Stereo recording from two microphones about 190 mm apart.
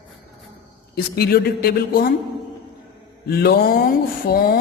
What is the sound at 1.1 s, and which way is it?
Speech, 55° left (ahead or behind).